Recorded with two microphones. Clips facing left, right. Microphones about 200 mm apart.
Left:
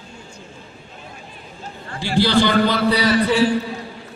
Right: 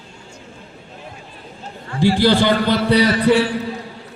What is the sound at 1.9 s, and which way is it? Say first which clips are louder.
Speech: right 3 dB; 50° right (ahead or behind).